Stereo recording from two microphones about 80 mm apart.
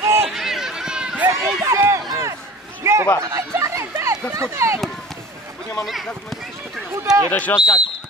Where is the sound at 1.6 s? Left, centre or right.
Right.